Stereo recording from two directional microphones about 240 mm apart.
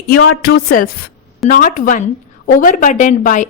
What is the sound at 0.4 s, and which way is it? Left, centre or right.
A woman's voice, left.